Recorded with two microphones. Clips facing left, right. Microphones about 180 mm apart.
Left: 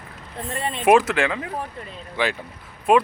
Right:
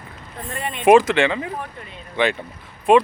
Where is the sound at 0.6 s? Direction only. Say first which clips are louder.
Left 1 dB; 30° left (ahead or behind).